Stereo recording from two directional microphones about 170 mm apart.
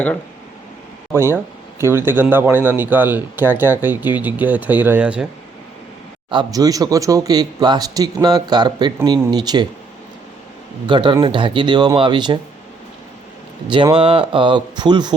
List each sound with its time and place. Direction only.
1.1 s a man's voice: 15° right (ahead or behind)
6.3 s a man's voice: 20° right (ahead or behind)
10.8 s a man's voice: 25° right (ahead or behind)
13.7 s a man's voice: 30° right (ahead or behind)